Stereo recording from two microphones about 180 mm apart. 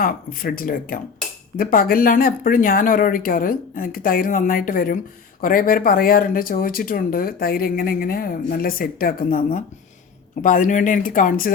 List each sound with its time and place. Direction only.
0.0 s speech: 50° left (ahead or behind)